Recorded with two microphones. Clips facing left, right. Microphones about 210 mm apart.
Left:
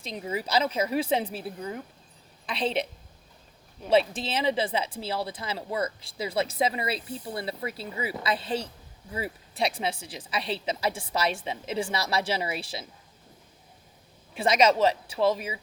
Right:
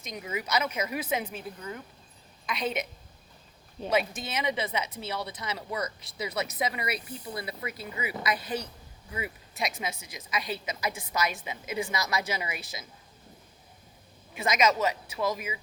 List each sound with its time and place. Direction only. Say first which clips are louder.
0.0 s speech: left 3 dB; 30° left (ahead or behind)
3.8 s speech: left 5 dB; 30° left (ahead or behind)
14.3 s speech: left 4 dB; 30° left (ahead or behind)